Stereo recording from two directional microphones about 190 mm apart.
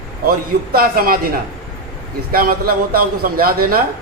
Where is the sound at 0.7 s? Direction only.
50° right (ahead or behind).